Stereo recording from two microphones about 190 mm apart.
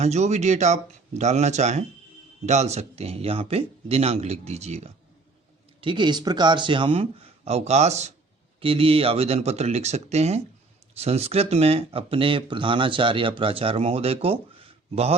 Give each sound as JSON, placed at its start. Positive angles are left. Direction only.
{"t": 0.0, "sound": "speech", "side_deg": -35}
{"t": 5.8, "sound": "speech", "side_deg": -25}